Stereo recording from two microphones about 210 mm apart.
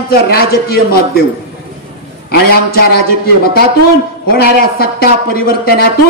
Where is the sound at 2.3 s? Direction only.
45° left (ahead or behind).